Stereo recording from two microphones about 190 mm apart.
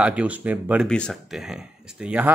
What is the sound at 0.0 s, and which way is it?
Speech, 5° right (ahead or behind).